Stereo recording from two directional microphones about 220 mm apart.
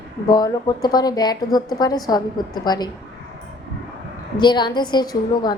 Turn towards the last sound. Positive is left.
turn(degrees=20)  # may be behind; listen again after turning